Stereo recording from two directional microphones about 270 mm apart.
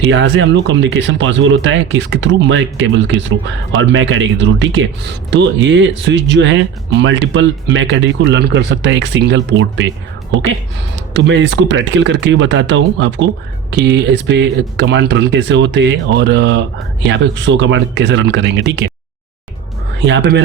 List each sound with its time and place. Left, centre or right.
0.0 s speech: right
10.9 s speech: right
20.0 s speech: right